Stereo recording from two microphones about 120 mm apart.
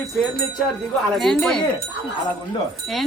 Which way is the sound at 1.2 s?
5° left (ahead or behind).